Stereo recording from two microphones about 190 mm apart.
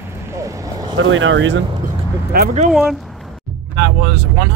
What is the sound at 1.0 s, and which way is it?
Speech, 90° right.